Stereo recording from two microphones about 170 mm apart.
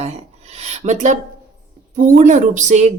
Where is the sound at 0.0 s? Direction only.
40° right (ahead or behind).